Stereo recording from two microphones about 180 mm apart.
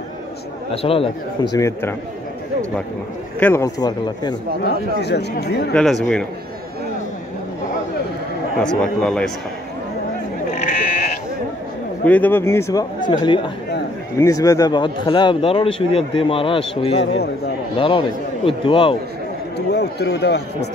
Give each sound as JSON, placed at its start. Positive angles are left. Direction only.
{"t": 0.8, "sound": "speech", "side_deg": 30}
{"t": 3.3, "sound": "speech", "side_deg": 10}
{"t": 3.6, "sound": "speech", "side_deg": 20}
{"t": 4.6, "sound": "speech", "side_deg": 65}
{"t": 5.7, "sound": "speech", "side_deg": 5}
{"t": 8.6, "sound": "speech", "side_deg": 5}
{"t": 10.6, "sound": "sheep", "side_deg": 40}
{"t": 12.0, "sound": "speech", "side_deg": 10}
{"t": 17.0, "sound": "speech", "side_deg": 75}
{"t": 17.7, "sound": "speech", "side_deg": 30}
{"t": 19.7, "sound": "speech", "side_deg": 70}